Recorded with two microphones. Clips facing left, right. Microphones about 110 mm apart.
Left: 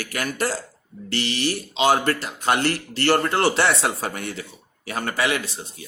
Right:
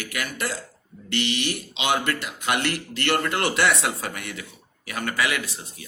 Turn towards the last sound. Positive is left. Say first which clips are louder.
# left 3 dB
turn(degrees=30)  # may be behind; listen again after turning